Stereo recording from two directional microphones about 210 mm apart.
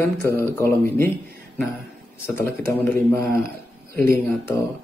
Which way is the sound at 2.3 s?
10° left (ahead or behind).